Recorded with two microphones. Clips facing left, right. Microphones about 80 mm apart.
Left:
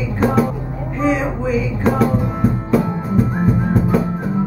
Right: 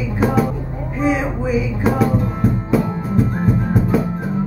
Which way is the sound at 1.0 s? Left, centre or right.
Centre.